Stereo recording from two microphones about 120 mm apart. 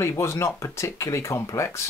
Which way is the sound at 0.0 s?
20° left (ahead or behind).